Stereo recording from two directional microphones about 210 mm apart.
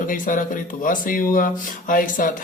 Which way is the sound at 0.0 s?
40° left (ahead or behind).